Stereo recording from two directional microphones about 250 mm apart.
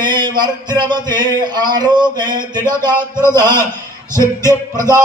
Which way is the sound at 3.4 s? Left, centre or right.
Centre.